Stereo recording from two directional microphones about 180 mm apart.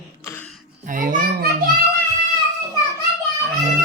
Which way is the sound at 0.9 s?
50° right (ahead or behind).